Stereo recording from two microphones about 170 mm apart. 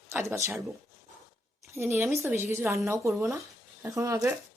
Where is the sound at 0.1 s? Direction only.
15° right (ahead or behind).